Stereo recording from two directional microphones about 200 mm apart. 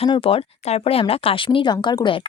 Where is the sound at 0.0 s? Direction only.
25° left (ahead or behind).